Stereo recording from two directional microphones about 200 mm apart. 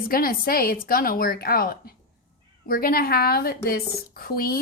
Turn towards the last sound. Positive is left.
turn(degrees=50)  # may be behind; listen again after turning